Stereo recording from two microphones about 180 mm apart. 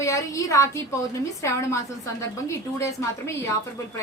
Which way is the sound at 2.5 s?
15° left (ahead or behind).